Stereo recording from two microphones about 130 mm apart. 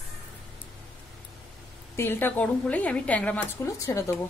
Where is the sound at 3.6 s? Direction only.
25° left (ahead or behind).